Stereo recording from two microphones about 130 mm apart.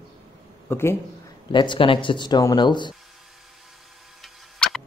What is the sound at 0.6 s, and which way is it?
Speech, 20° left (ahead or behind).